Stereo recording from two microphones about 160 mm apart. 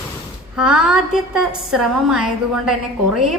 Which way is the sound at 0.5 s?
5° right (ahead or behind).